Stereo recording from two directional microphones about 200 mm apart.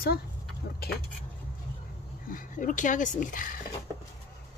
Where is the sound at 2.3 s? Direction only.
40° left (ahead or behind).